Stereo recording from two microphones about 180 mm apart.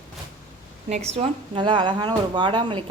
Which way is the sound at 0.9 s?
40° right (ahead or behind).